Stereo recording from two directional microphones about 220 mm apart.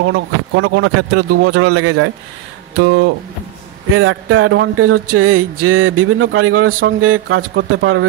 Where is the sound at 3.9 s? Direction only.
70° right (ahead or behind).